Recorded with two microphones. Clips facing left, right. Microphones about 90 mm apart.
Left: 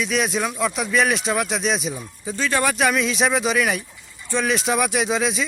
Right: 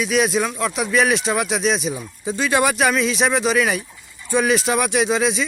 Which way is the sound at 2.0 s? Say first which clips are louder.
Right 3 dB; 15° right (ahead or behind).